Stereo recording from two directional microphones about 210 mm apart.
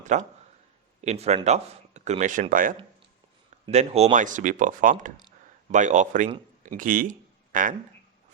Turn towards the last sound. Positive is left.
turn(degrees=-40)  # may be behind; listen again after turning